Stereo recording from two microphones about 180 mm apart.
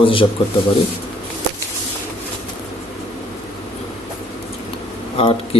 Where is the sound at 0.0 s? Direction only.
30° left (ahead or behind).